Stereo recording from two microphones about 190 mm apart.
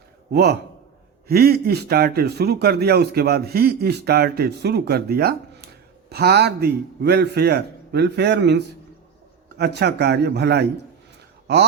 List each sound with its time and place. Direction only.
0.3 s a man's voice: 60° right (ahead or behind)